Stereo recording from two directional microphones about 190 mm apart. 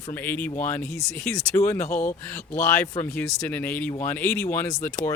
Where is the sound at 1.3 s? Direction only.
15° left (ahead or behind).